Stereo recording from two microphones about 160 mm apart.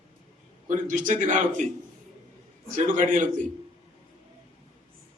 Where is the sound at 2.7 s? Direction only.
50° right (ahead or behind).